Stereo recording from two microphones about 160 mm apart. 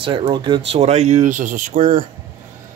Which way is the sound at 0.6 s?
40° right (ahead or behind).